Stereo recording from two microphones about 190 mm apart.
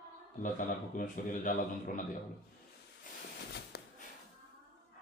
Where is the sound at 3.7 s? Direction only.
55° left (ahead or behind).